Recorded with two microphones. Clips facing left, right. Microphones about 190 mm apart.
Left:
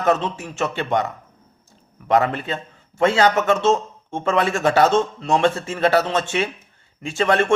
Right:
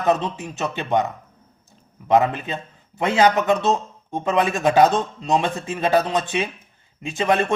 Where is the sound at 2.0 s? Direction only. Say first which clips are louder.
Right 1 dB; 20° right (ahead or behind).